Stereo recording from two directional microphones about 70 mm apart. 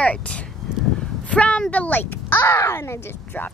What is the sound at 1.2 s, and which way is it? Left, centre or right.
Speech, centre.